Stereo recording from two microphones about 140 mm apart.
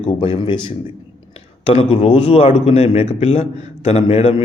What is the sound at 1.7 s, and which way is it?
Speech, 45° left (ahead or behind).